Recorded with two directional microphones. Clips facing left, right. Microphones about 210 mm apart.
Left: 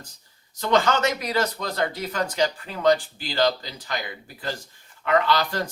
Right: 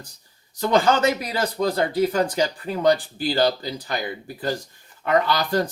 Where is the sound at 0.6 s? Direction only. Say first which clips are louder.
Right 3 dB; 30° right (ahead or behind).